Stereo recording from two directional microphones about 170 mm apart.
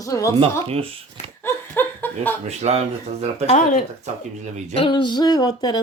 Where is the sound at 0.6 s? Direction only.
35° right (ahead or behind).